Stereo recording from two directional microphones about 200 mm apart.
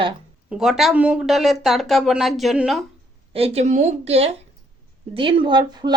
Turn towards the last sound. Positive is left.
turn(degrees=-20)  # may be behind; listen again after turning